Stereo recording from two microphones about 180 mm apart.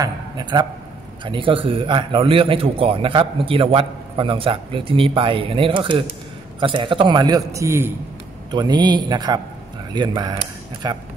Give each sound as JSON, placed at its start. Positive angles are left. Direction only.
{"t": 0.0, "sound": "a man's voice", "side_deg": -25}